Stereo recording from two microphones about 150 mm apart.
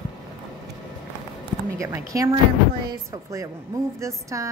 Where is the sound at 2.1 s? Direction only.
20° right (ahead or behind).